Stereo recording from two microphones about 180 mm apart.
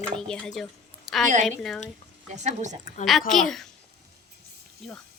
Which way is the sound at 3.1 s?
Centre (ahead or behind).